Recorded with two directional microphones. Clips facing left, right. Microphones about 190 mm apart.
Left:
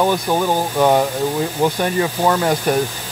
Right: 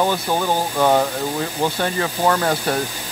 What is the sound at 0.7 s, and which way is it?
Speech, 15° left (ahead or behind).